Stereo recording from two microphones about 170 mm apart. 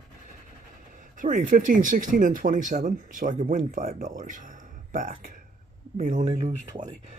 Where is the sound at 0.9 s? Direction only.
50° right (ahead or behind).